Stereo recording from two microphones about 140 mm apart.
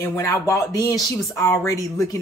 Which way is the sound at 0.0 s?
20° left (ahead or behind).